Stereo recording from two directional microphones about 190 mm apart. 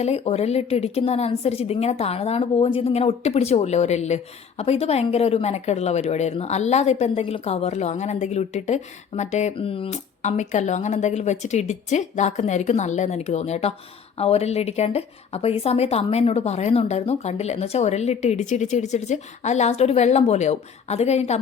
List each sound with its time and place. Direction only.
0.0 s a woman's voice: 35° left (ahead or behind)